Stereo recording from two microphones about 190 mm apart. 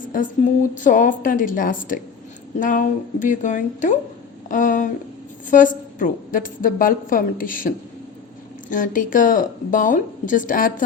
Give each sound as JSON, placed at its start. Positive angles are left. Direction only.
{"t": 0.8, "sound": "a woman's voice", "side_deg": 45}
{"t": 8.7, "sound": "a woman's voice", "side_deg": 45}